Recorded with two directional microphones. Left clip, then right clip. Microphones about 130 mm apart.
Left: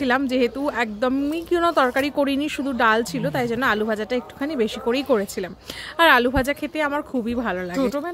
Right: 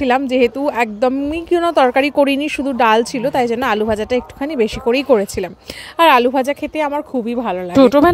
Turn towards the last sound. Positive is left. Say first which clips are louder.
# right 13 dB
turn(degrees=-70)  # may be behind; listen again after turning